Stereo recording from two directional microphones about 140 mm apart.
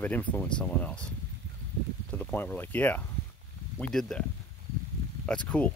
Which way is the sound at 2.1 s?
15° left (ahead or behind).